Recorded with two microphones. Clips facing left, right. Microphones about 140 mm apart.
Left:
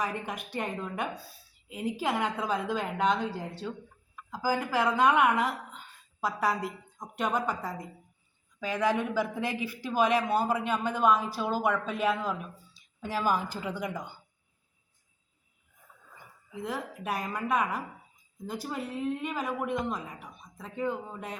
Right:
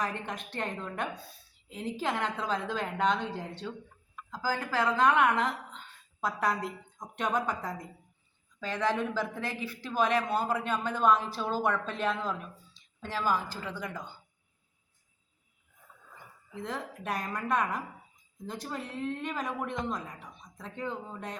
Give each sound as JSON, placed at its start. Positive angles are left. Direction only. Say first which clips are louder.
{"t": 0.0, "sound": "speech", "louder": "left 1 dB", "side_deg": 10}
{"t": 16.6, "sound": "a woman's voice", "louder": "left 2 dB", "side_deg": 5}